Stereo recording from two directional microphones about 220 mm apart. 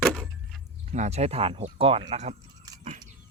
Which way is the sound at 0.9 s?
30° right (ahead or behind).